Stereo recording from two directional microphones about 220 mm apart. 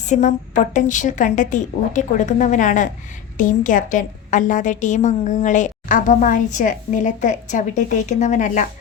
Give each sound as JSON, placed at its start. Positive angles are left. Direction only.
{"t": 0.1, "sound": "a woman's voice", "side_deg": 35}